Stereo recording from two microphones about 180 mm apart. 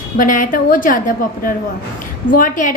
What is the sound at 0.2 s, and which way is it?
A woman's voice, 50° left (ahead or behind).